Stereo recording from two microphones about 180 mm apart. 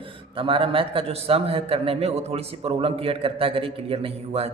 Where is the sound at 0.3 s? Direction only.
30° right (ahead or behind).